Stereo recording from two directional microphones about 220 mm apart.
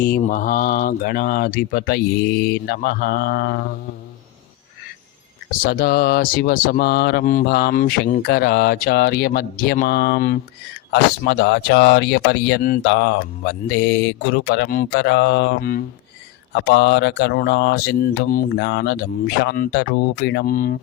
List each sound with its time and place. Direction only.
0.0 s speech: 40° left (ahead or behind)
5.5 s speech: 40° left (ahead or behind)